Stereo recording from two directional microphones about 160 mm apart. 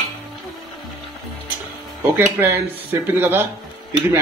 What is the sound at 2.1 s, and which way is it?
Speech, 15° right (ahead or behind).